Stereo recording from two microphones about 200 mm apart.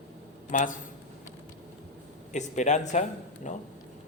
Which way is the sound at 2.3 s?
35° left (ahead or behind).